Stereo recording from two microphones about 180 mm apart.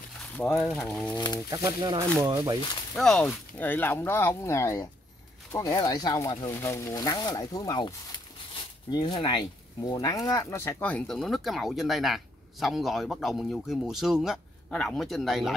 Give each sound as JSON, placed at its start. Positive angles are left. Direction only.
{"t": 0.2, "sound": "speech", "side_deg": 5}
{"t": 1.1, "sound": "speech", "side_deg": 25}
{"t": 1.5, "sound": "speech", "side_deg": -20}
{"t": 3.0, "sound": "speech", "side_deg": 5}
{"t": 8.9, "sound": "speech", "side_deg": 25}